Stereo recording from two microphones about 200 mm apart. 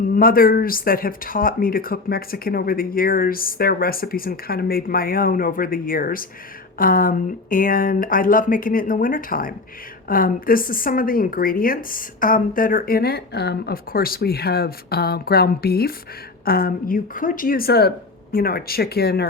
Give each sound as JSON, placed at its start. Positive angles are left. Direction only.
{"t": 0.0, "sound": "speech", "side_deg": 45}